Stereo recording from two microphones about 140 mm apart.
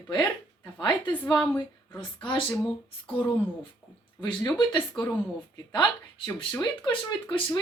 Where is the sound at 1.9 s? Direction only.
35° left (ahead or behind).